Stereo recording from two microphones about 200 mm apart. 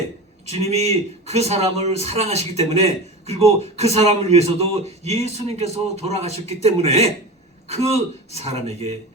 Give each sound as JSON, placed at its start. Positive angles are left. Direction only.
{"t": 0.4, "sound": "a man's voice", "side_deg": -30}